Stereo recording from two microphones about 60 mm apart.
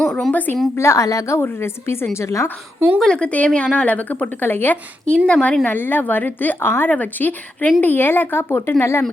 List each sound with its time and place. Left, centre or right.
0.1 s a woman's voice: centre
0.3 s a woman's voice: left
0.8 s a woman's voice: left
1.4 s a woman's voice: left
2.1 s a woman's voice: left
3.0 s a woman's voice: centre; by 4.8 s left
5.0 s a woman's voice: centre
5.6 s a woman's voice: left